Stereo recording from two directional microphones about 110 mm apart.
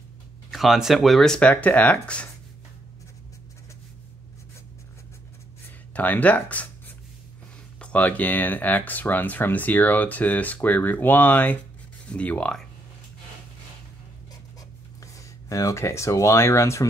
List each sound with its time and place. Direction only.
0.5 s speech: centre (ahead or behind)
5.9 s speech: 15° left (ahead or behind)
7.8 s speech: 10° left (ahead or behind)
15.1 s speech: 30° left (ahead or behind)